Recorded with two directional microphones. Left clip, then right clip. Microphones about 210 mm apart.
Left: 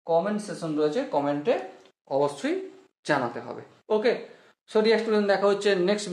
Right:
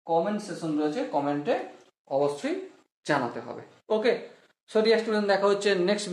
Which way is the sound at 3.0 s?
15° left (ahead or behind).